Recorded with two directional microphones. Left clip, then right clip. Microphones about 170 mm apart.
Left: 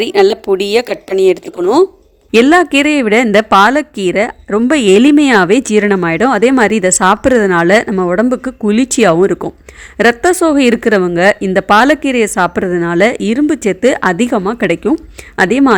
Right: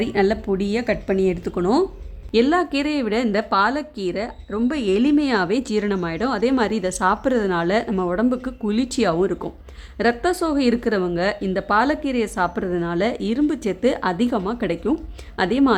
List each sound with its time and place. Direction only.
0.0 s a woman's voice: 45° left (ahead or behind)